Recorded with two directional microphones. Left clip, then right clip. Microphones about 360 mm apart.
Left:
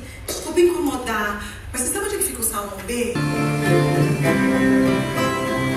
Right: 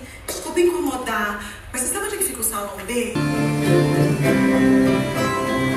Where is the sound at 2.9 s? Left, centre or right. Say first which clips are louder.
Right 1 dB; centre.